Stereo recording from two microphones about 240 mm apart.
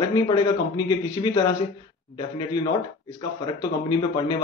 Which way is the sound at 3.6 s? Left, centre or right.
Centre.